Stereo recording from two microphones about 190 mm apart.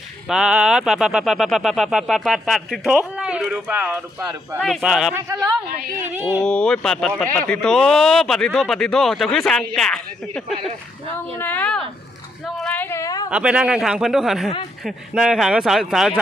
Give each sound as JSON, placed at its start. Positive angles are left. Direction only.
{"t": 0.3, "sound": "speech", "side_deg": -5}
{"t": 5.1, "sound": "speech", "side_deg": -20}
{"t": 6.4, "sound": "speech", "side_deg": 5}
{"t": 13.3, "sound": "speech", "side_deg": -5}